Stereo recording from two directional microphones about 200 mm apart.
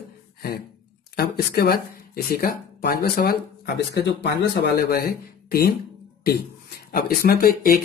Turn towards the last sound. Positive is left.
turn(degrees=45)  # may be behind; listen again after turning